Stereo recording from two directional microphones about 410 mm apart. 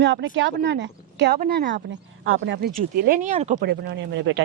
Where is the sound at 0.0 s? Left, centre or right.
Right.